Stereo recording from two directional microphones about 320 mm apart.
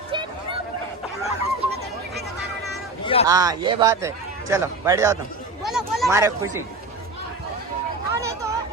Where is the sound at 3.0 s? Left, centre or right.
Centre.